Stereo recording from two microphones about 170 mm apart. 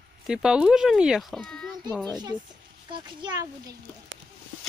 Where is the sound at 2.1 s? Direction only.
25° right (ahead or behind).